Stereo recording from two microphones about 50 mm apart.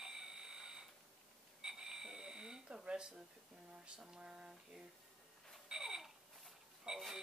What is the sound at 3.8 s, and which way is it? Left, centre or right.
Speech, centre.